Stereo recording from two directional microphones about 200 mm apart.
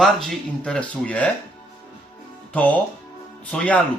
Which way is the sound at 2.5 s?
5° left (ahead or behind).